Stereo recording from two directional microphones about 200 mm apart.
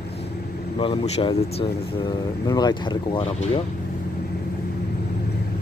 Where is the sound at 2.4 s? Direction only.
20° left (ahead or behind).